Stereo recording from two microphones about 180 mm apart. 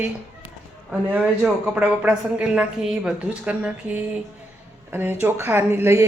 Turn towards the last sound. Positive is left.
turn(degrees=-15)  # may be behind; listen again after turning